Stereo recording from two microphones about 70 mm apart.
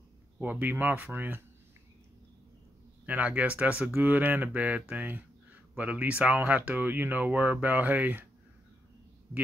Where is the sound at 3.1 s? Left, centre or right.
Centre.